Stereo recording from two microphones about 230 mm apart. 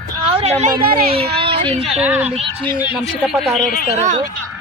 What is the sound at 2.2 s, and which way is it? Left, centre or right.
Speech, right.